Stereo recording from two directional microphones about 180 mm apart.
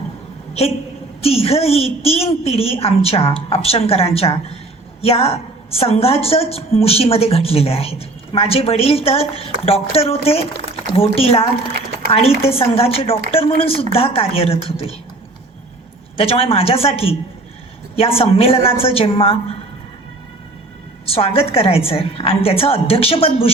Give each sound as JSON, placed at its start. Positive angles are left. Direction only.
{"t": 1.2, "sound": "a woman's voice", "side_deg": 35}
{"t": 16.1, "sound": "a woman's voice", "side_deg": 30}
{"t": 21.1, "sound": "a woman's voice", "side_deg": 30}